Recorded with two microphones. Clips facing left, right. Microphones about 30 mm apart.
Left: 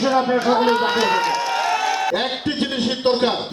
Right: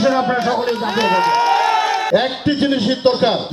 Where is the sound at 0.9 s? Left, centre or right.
Right.